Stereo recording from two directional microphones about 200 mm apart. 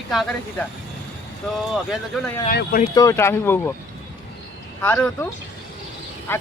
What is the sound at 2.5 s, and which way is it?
Speech, 50° left (ahead or behind).